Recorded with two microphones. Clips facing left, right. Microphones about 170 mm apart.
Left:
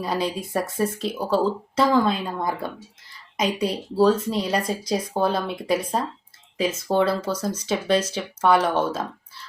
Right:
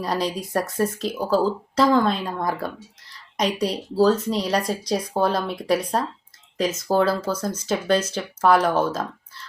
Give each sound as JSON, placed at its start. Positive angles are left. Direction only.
{"t": 0.0, "sound": "speech", "side_deg": 5}